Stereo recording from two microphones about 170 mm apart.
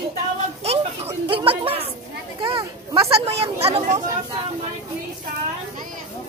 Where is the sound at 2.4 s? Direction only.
30° right (ahead or behind).